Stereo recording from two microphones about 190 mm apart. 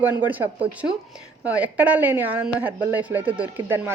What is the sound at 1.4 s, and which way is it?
A woman's voice, 5° right (ahead or behind).